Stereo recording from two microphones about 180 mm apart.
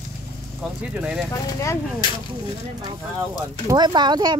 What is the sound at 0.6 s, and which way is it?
Speech, 5° right (ahead or behind).